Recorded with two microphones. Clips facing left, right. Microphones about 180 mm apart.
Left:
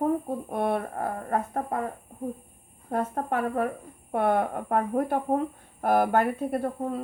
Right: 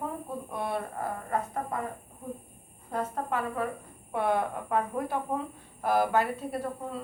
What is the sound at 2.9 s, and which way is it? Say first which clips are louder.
A woman's voice: left 4 dB; 55° left (ahead or behind).